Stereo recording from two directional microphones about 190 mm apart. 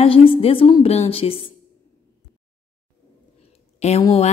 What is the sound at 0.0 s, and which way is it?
A woman's voice, 30° left (ahead or behind).